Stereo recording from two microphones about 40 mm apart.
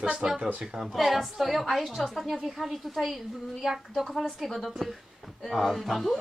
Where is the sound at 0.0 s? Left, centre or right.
Centre.